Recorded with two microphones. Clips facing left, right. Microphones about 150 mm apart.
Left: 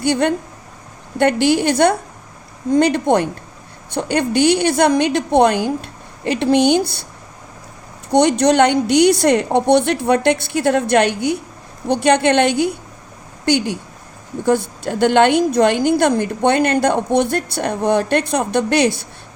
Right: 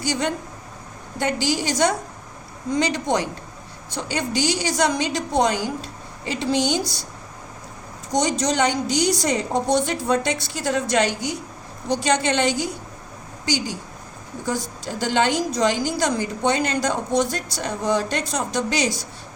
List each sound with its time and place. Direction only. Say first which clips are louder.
0.0 s a woman's voice: left 8 dB; 60° left (ahead or behind)
8.1 s a woman's voice: left 8 dB; 65° left (ahead or behind)